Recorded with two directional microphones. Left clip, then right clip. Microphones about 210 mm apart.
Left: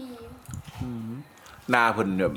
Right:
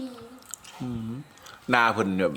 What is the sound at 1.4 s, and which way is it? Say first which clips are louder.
Speech: even; 5° right (ahead or behind).